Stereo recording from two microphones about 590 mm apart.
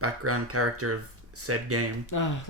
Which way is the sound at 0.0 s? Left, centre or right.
Right.